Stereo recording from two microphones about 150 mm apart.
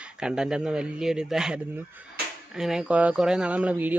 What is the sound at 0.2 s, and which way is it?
A man's voice, 5° right (ahead or behind).